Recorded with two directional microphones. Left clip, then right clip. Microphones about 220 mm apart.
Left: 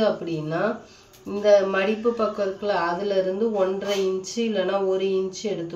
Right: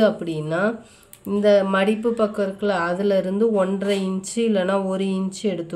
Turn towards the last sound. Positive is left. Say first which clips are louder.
# left 1 dB
turn(degrees=-50)  # may be behind; listen again after turning